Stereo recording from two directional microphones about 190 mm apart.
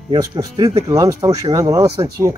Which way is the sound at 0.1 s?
25° right (ahead or behind).